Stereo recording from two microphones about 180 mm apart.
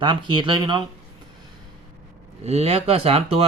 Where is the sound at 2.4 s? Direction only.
35° right (ahead or behind).